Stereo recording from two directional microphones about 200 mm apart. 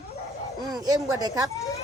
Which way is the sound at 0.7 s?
20° right (ahead or behind).